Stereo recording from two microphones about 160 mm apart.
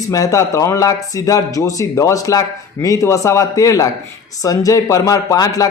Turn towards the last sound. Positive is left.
turn(degrees=25)  # may be behind; listen again after turning